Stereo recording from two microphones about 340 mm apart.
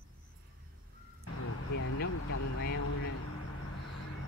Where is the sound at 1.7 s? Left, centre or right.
Left.